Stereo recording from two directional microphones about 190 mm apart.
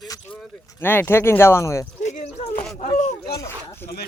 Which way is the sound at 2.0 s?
35° left (ahead or behind).